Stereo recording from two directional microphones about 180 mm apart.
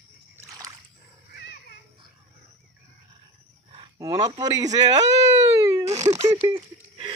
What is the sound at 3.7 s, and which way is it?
Speech, 20° right (ahead or behind).